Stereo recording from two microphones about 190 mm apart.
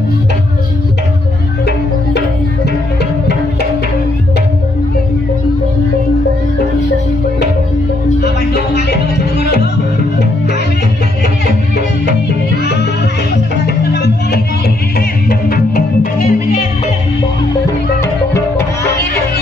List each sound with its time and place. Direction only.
2.1 s music: 60° left (ahead or behind)
8.2 s music: 60° left (ahead or behind)
13.7 s music: 55° left (ahead or behind)